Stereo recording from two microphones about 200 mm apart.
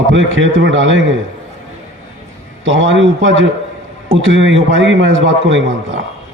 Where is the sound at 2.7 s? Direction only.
70° right (ahead or behind).